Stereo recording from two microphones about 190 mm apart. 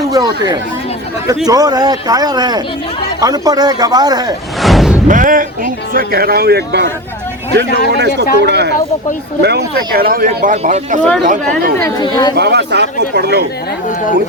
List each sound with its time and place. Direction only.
0.1 s speech: 20° right (ahead or behind)
4.6 s music: centre (ahead or behind)
5.0 s speech: 45° right (ahead or behind)
11.8 s speech: 15° left (ahead or behind)
12.4 s speech: 60° right (ahead or behind)